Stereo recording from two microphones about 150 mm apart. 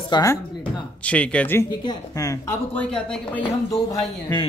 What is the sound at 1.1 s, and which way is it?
Speech, 10° left (ahead or behind).